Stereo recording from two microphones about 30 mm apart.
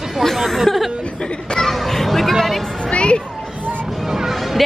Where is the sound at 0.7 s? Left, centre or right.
Centre.